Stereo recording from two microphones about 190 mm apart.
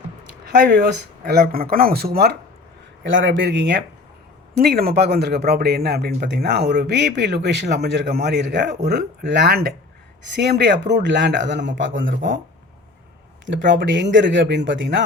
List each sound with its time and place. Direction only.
0.8 s speech: 55° right (ahead or behind)
3.0 s speech: 80° right
4.6 s speech: 55° right (ahead or behind); by 11.9 s 70° right (ahead or behind)
13.4 s speech: 70° right (ahead or behind)